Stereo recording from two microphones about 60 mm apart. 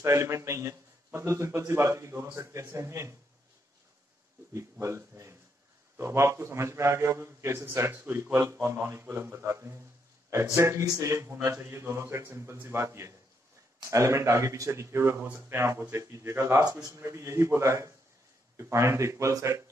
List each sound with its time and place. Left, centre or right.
0.0 s a man's voice: right
4.6 s a man's voice: right
7.6 s a man's voice: right
11.0 s a man's voice: right
11.4 s a man's voice: right
16.5 s a man's voice: right
17.6 s a man's voice: right
18.6 s a man's voice: right